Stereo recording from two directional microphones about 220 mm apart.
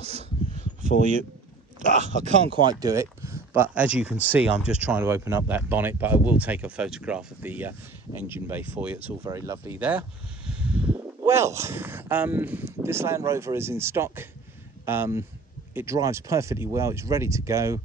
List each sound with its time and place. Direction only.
0.0 s a sound: 30° right (ahead or behind)
2.0 s speech: 30° right (ahead or behind)
2.6 s speech: 15° right (ahead or behind)